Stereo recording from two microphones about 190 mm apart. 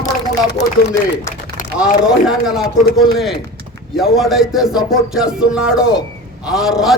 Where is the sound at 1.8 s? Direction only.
5° right (ahead or behind).